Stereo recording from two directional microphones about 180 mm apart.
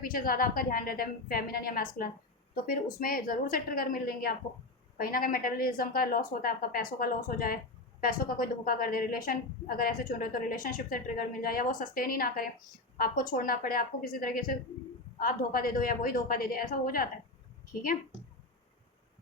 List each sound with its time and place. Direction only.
0.0 s a woman's voice: 50° left (ahead or behind)